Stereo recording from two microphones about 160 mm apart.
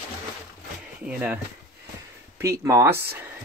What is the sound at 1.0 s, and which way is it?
Speech, 10° right (ahead or behind).